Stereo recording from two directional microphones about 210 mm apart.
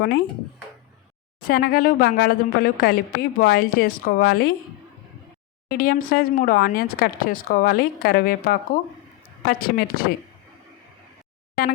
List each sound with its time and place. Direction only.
1.4 s a woman's voice: 45° left (ahead or behind)
5.6 s a woman's voice: 45° left (ahead or behind)